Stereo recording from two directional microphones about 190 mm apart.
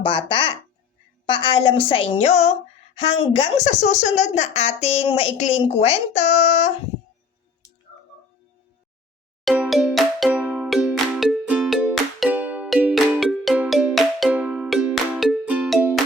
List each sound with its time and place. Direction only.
0.0 s a woman's voice: 25° left (ahead or behind)
9.4 s music: centre (ahead or behind)